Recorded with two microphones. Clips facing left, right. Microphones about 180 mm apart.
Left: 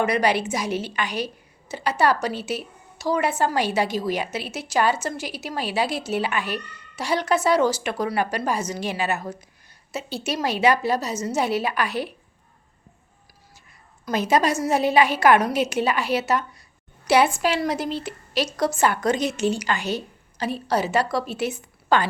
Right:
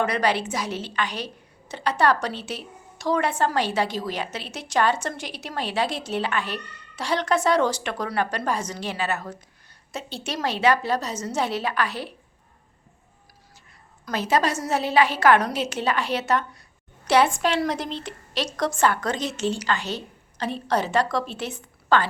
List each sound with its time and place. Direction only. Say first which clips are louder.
0.0 s a woman's voice: left 2 dB; 10° left (ahead or behind)
14.0 s a woman's voice: left 2 dB; 15° left (ahead or behind)